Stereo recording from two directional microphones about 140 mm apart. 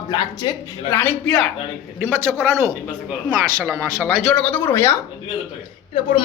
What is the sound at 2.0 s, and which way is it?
Speech, 20° right (ahead or behind).